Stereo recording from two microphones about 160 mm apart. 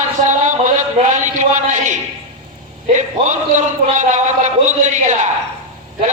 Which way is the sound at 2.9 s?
50° right (ahead or behind).